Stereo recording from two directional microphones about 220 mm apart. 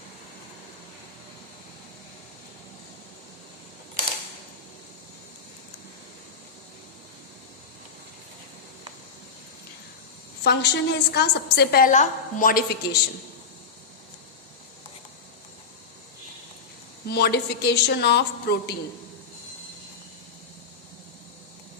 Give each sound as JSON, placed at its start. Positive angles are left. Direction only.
{"t": 10.4, "sound": "a woman's voice", "side_deg": 50}
{"t": 17.1, "sound": "a woman's voice", "side_deg": 50}